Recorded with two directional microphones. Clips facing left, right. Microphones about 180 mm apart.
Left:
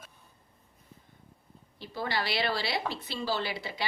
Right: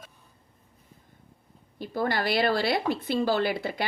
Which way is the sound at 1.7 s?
50° right (ahead or behind).